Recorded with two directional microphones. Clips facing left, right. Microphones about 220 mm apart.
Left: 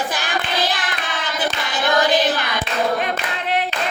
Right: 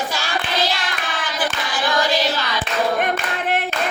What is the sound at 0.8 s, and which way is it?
Singing, 20° left (ahead or behind).